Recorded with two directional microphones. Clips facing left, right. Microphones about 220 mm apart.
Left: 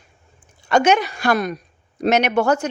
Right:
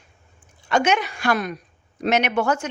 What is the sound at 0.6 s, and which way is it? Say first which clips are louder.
Speech: left 4 dB; 40° left (ahead or behind).